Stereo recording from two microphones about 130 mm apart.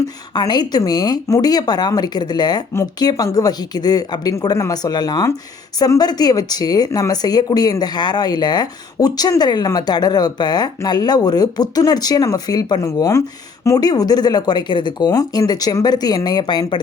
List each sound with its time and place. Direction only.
0.3 s speech: 35° left (ahead or behind)